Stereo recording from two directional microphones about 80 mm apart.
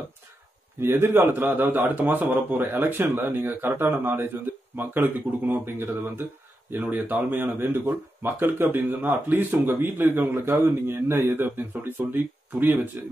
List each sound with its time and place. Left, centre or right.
0.7 s speech: right